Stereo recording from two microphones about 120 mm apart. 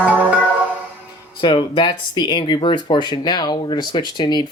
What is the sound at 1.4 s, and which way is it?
Speech, 40° left (ahead or behind).